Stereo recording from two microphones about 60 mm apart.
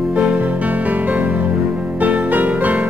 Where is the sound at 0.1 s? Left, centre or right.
Centre.